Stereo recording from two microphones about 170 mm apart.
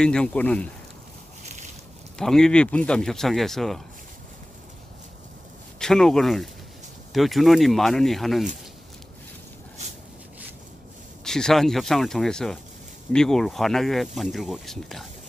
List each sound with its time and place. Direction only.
0.0 s speech: 5° left (ahead or behind)
1.4 s boat: 45° right (ahead or behind)
2.1 s speech: 5° left (ahead or behind)
5.8 s speech: 5° left (ahead or behind)
11.2 s speech: 5° left (ahead or behind)